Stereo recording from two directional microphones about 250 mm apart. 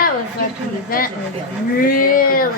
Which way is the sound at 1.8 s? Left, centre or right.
Left.